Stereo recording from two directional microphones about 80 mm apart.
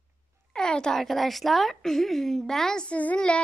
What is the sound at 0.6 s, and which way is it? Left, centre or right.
A woman's voice, centre.